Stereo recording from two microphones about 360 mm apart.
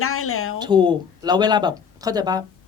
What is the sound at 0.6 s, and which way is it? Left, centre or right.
Speech, centre.